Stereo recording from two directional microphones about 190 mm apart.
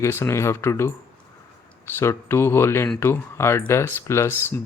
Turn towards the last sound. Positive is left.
turn(degrees=10)  # may be behind; listen again after turning